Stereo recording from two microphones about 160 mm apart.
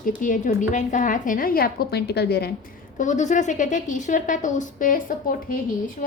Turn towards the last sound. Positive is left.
turn(degrees=60)  # may be behind; listen again after turning